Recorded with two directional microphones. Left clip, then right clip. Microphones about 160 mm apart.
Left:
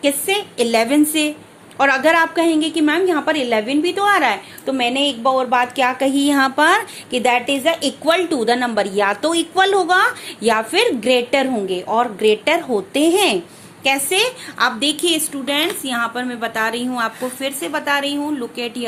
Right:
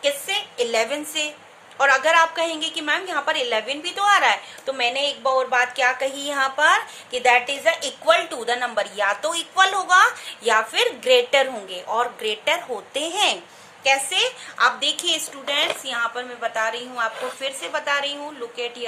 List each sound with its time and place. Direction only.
0.0 s a woman's voice: 45° left (ahead or behind)
16.4 s a woman's voice: 60° left (ahead or behind)